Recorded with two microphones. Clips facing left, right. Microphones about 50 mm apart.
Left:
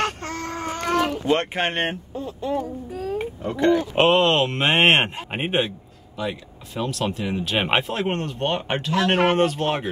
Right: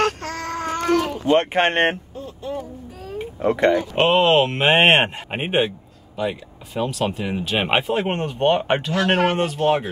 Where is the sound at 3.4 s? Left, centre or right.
Right.